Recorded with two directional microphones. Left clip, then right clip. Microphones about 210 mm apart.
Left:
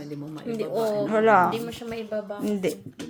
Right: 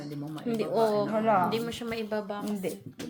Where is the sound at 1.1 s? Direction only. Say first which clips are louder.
Left 7 dB; 60° left (ahead or behind).